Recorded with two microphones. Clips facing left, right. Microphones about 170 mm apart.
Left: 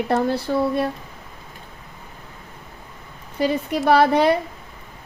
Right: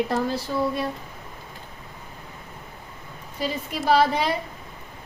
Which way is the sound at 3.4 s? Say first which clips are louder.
Left 7 dB; 60° left (ahead or behind).